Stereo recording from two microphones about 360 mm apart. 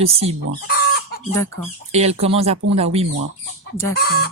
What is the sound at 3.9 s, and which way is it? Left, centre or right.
Speech, left.